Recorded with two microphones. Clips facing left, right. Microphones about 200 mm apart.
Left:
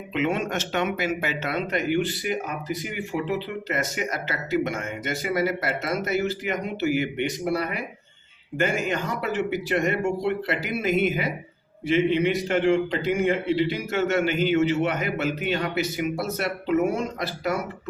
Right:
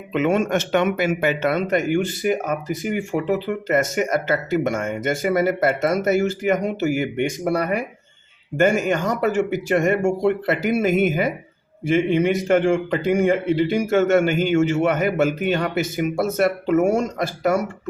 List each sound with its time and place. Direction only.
0.1 s speech: 50° right (ahead or behind)